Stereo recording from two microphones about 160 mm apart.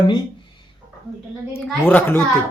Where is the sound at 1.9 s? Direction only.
15° left (ahead or behind).